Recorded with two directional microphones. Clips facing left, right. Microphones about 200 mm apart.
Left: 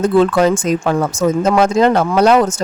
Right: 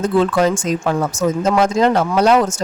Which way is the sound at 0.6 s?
60° left (ahead or behind).